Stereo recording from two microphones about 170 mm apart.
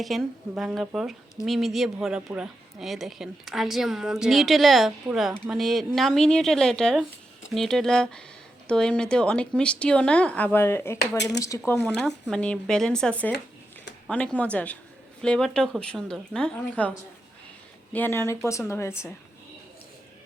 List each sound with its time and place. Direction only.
0.0 s speech: centre (ahead or behind); by 11.8 s 15° left (ahead or behind)
11.8 s speech: 5° left (ahead or behind)
17.9 s speech: 15° left (ahead or behind)